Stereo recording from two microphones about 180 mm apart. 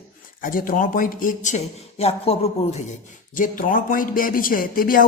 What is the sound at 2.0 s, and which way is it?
Speech, 35° left (ahead or behind).